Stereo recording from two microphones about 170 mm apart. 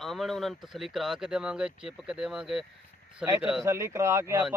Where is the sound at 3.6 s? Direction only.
15° right (ahead or behind).